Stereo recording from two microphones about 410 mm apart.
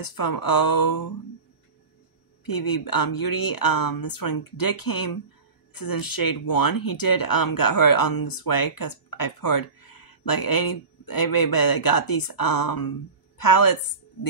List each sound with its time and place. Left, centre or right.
0.0 s speech: left
2.4 s speech: left